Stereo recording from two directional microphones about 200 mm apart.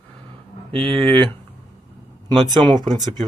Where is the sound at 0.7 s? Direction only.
25° right (ahead or behind).